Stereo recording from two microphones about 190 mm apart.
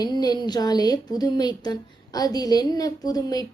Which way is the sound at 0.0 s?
20° left (ahead or behind).